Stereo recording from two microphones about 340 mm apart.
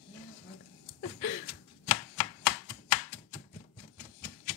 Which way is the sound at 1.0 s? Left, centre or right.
Left.